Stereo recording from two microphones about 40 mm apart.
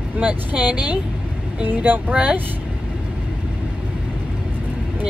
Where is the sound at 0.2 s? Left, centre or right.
Right.